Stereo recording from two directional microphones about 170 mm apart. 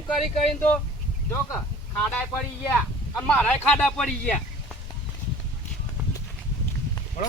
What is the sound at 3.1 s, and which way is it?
A man's voice, 5° left (ahead or behind).